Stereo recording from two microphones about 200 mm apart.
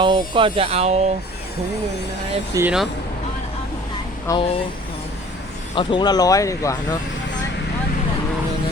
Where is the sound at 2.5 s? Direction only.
10° right (ahead or behind).